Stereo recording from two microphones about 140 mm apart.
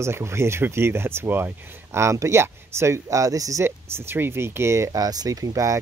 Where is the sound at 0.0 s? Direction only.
20° right (ahead or behind).